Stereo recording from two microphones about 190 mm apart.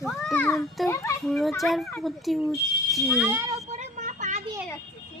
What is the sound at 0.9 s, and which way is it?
Speech, 15° left (ahead or behind).